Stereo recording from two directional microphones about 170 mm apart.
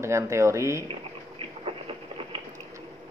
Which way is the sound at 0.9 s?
35° right (ahead or behind).